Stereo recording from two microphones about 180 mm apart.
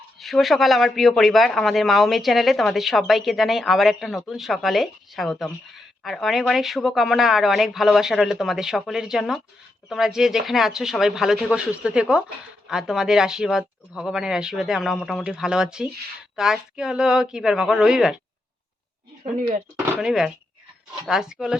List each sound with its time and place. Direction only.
0.2 s speech: centre (ahead or behind)
19.2 s speech: 35° right (ahead or behind)
20.0 s speech: 5° right (ahead or behind)